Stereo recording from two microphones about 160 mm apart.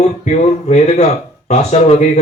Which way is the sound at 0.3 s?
45° left (ahead or behind).